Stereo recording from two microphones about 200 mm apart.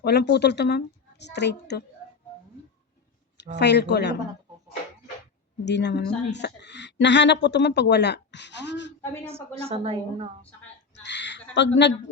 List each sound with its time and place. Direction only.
0.0 s speech: 55° left (ahead or behind)
3.5 s speech: 55° left (ahead or behind)
5.6 s speech: 60° left (ahead or behind)
9.6 s a woman's voice: 30° right (ahead or behind)
11.0 s a sound: 60° left (ahead or behind)
11.5 s speech: 60° left (ahead or behind)